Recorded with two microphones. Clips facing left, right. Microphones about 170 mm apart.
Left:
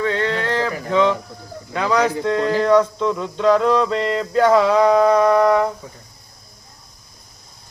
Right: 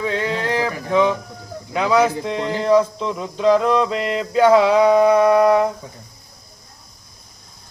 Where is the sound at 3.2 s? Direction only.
10° right (ahead or behind).